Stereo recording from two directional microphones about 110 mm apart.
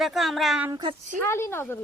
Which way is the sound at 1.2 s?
20° left (ahead or behind).